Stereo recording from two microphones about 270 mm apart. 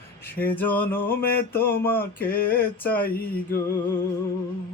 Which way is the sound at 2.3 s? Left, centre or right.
Left.